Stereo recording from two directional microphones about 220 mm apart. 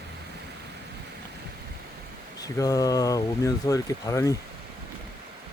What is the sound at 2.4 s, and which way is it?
Speech, 15° left (ahead or behind).